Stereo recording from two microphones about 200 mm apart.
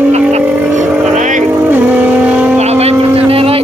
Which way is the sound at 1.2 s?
40° right (ahead or behind).